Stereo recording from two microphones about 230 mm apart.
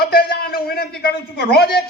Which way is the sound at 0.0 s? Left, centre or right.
Left.